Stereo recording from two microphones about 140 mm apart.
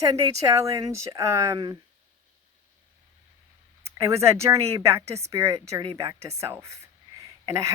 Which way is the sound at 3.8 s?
20° right (ahead or behind).